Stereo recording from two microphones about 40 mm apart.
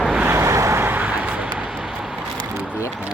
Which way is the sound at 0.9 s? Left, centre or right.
Right.